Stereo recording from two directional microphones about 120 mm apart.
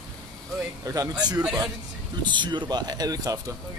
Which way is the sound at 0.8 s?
30° right (ahead or behind).